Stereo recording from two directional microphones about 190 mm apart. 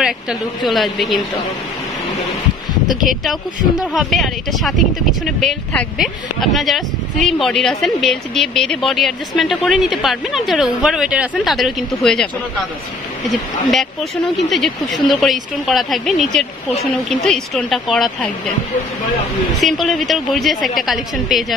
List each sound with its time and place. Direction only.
0.0 s speech: centre (ahead or behind)
3.1 s speech: centre (ahead or behind)
13.3 s speech: centre (ahead or behind)
19.6 s speech: centre (ahead or behind)